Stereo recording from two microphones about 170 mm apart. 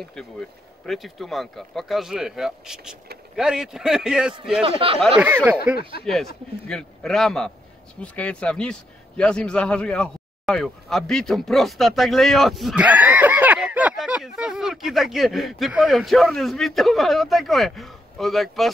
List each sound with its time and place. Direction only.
0.1 s a man's voice: 5° left (ahead or behind)
4.6 s a man's voice: 35° right (ahead or behind)
6.1 s a man's voice: 5° left (ahead or behind)